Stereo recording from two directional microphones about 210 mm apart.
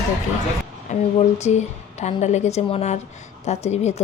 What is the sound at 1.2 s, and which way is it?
A woman's voice, 30° left (ahead or behind).